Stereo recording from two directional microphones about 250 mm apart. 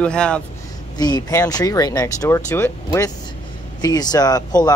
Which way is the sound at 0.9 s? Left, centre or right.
Centre.